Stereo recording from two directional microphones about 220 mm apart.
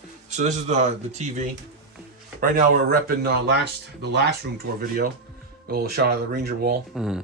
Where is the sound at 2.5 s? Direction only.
40° right (ahead or behind).